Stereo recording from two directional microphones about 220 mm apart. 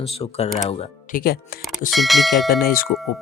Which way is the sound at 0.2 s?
25° left (ahead or behind).